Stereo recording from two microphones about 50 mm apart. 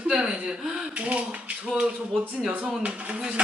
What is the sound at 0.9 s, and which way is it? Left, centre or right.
Speech, right.